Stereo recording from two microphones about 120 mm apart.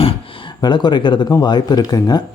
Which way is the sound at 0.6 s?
40° left (ahead or behind).